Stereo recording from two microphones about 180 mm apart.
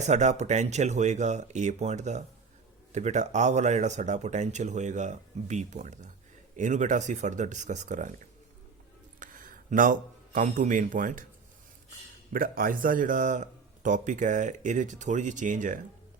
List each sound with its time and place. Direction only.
0.0 s a man's voice: 40° right (ahead or behind)
9.2 s a man's voice: 50° right (ahead or behind)
12.3 s a man's voice: 50° right (ahead or behind)